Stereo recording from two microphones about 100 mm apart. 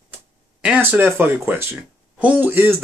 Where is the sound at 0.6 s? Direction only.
15° right (ahead or behind).